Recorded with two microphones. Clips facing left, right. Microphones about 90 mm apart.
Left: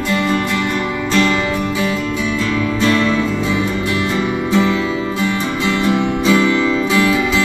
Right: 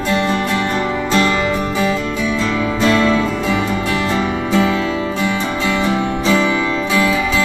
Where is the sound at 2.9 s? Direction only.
5° right (ahead or behind).